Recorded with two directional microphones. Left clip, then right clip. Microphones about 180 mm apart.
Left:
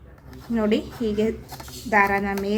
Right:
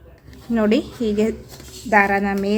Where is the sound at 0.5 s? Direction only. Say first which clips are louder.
Right 4 dB; 30° right (ahead or behind).